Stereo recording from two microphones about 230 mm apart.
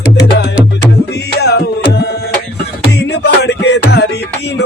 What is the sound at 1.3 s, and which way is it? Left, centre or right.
Music, left.